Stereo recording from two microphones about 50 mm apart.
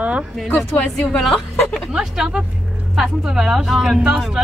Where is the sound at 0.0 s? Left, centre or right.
Right.